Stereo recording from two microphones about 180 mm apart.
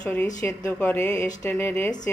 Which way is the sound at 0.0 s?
10° left (ahead or behind).